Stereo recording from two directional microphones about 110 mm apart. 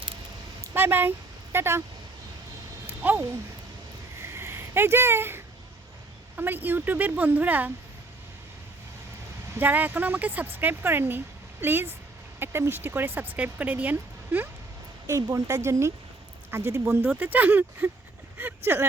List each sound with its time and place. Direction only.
0.6 s a sound: 20° right (ahead or behind)
1.5 s speech: 20° right (ahead or behind)
2.8 s a sound: 20° right (ahead or behind)
6.3 s speech: 15° right (ahead or behind)
9.6 s speech: 15° right (ahead or behind)
15.0 s speech: 30° right (ahead or behind)